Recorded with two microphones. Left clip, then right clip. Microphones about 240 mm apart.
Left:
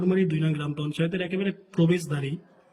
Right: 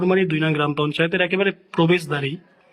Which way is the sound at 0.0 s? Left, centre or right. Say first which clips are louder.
Right 7 dB; centre.